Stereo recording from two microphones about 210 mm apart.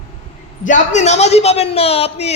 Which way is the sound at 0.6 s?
35° left (ahead or behind).